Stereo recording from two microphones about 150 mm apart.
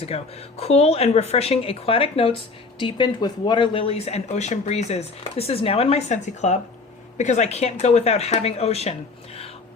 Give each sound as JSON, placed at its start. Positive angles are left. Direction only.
{"t": 0.0, "sound": "speech", "side_deg": 40}